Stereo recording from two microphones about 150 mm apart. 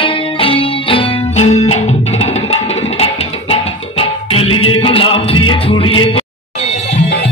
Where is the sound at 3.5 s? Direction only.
40° left (ahead or behind).